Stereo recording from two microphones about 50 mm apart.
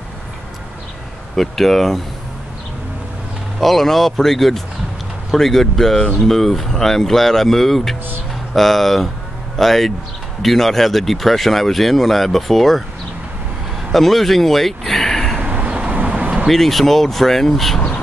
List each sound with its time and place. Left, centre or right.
1.3 s speech: centre
3.5 s speech: centre
13.9 s speech: centre
15.4 s vehicle: right
16.4 s speech: centre